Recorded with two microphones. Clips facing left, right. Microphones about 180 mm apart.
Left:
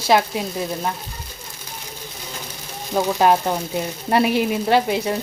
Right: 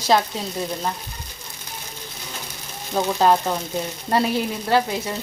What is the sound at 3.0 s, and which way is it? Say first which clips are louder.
Frying: left 1 dB; 15° left (ahead or behind).